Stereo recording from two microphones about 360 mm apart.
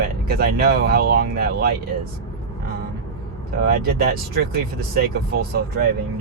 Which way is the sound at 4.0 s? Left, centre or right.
Right.